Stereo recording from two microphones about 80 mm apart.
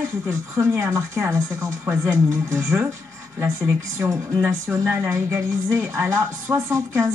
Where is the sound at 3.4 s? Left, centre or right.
Right.